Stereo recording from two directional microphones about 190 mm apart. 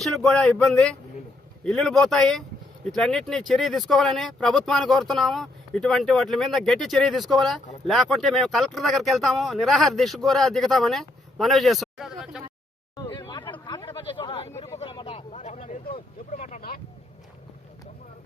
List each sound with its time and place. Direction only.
0.0 s speech: 5° left (ahead or behind)
13.0 s a sound: 25° left (ahead or behind)
14.8 s vehicle: 25° left (ahead or behind)
16.4 s speech: 50° left (ahead or behind)